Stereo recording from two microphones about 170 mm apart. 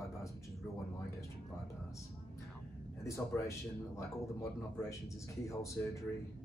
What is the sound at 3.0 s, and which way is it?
Speech, 15° left (ahead or behind).